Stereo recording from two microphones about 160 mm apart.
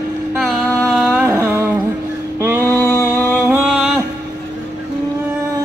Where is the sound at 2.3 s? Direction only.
15° right (ahead or behind).